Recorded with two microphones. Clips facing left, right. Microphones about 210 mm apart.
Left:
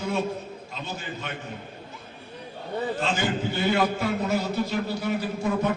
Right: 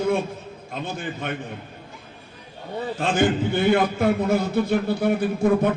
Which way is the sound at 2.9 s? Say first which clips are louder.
Right 10 dB; 55° right (ahead or behind).